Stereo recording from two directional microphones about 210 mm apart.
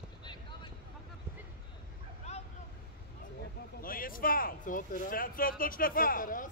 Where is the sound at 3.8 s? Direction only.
40° left (ahead or behind).